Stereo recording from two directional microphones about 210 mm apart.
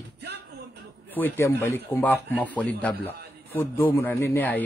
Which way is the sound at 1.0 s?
10° left (ahead or behind).